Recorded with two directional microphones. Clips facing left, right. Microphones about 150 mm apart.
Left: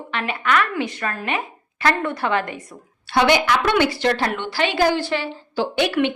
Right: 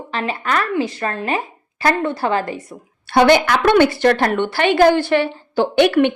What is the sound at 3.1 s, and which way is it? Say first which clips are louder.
A woman's voice: right 4 dB; 50° right (ahead or behind).